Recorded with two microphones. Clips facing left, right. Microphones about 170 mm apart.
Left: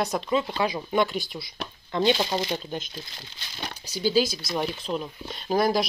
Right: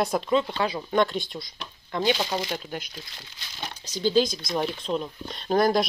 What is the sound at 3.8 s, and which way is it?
Speech, 10° left (ahead or behind).